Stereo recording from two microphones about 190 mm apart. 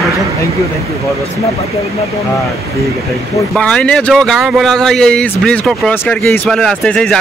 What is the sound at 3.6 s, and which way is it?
Speech, 5° left (ahead or behind).